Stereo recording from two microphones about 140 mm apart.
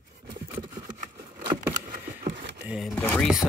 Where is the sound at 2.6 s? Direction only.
5° right (ahead or behind).